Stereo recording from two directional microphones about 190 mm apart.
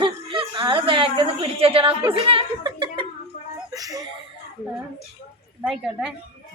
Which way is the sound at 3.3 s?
45° left (ahead or behind).